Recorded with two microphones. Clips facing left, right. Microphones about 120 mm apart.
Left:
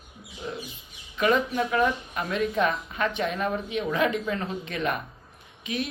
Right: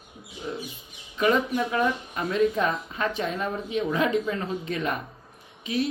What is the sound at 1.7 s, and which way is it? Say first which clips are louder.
Speech: left 1 dB; 30° right (ahead or behind).